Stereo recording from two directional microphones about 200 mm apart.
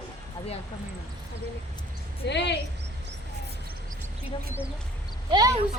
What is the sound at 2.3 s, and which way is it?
Speech, 60° left (ahead or behind).